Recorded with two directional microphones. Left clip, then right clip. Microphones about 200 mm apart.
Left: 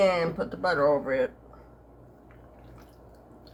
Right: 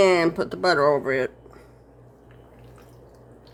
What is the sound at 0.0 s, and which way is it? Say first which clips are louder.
Speech: right 5 dB; 60° right (ahead or behind).